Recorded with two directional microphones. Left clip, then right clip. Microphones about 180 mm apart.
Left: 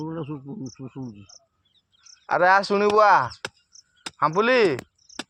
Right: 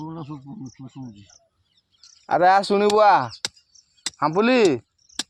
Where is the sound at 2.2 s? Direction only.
80° right; by 4.7 s 65° right (ahead or behind).